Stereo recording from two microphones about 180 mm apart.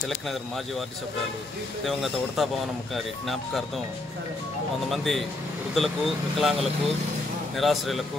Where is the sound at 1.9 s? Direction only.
Centre (ahead or behind).